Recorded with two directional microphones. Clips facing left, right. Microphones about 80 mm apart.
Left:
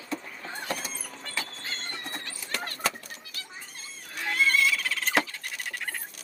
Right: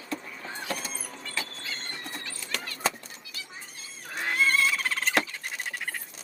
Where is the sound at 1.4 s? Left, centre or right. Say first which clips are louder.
Left 1 dB; left.